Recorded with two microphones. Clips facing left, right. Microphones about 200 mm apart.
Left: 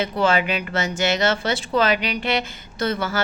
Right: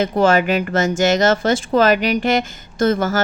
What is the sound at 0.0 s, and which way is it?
Speech, 45° right (ahead or behind).